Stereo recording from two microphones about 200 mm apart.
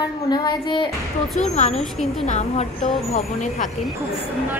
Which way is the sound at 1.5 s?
35° left (ahead or behind).